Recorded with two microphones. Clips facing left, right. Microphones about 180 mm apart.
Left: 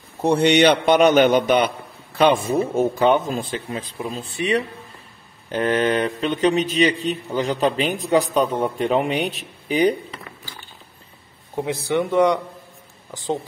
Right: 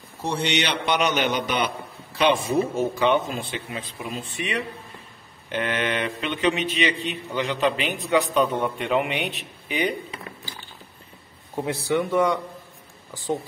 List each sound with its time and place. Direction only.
0.2 s a man's voice: 60° left (ahead or behind); by 9.9 s 40° left (ahead or behind)
11.5 s a man's voice: 15° left (ahead or behind)